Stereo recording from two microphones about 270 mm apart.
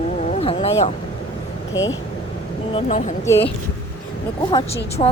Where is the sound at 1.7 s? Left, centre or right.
Left.